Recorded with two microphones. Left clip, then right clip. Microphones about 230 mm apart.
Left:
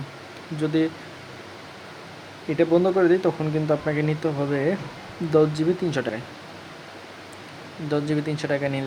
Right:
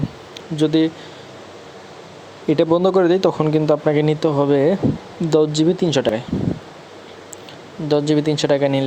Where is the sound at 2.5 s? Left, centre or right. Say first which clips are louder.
Right 5 dB; right.